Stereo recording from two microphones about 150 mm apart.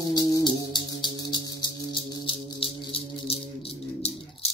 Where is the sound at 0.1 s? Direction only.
30° left (ahead or behind).